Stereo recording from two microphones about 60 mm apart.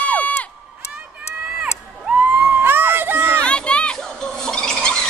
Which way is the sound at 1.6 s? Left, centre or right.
Right.